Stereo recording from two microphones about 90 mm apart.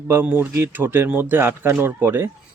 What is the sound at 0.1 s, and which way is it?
Speech, 20° right (ahead or behind).